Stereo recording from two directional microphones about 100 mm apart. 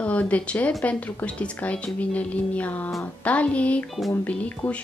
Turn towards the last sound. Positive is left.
turn(degrees=10)  # may be behind; listen again after turning